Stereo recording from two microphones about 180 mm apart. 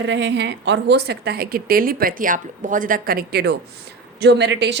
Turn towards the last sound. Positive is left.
turn(degrees=-70)  # may be behind; listen again after turning